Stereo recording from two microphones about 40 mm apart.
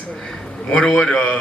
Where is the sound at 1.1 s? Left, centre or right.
Left.